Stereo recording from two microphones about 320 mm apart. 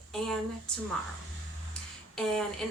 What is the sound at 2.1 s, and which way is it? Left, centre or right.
Speech, centre.